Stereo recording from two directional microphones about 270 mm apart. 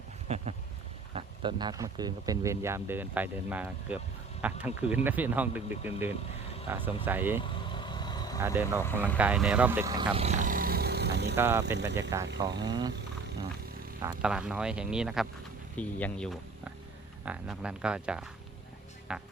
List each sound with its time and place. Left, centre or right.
0.3 s a sound: right
1.1 s speech: centre
7.7 s vehicle: centre
8.4 s speech: centre; by 11.3 s right
11.3 s speech: centre
14.0 s speech: centre